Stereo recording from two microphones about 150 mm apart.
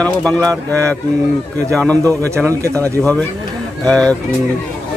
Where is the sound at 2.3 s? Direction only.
20° right (ahead or behind).